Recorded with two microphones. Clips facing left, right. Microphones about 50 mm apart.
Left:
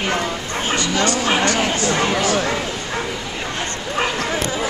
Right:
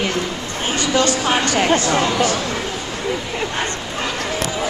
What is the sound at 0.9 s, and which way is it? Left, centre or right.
Speech, left.